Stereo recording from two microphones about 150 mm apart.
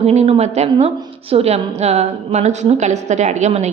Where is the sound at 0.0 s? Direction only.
45° right (ahead or behind).